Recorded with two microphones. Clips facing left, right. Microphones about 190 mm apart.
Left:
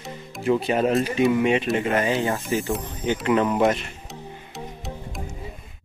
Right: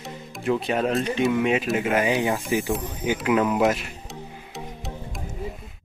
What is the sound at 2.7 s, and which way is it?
Speech, 5° right (ahead or behind).